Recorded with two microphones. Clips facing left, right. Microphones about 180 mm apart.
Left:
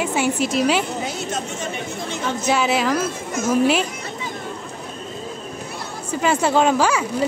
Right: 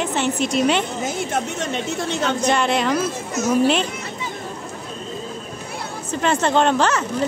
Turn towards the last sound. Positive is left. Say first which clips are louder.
# even
turn(degrees=10)  # may be behind; listen again after turning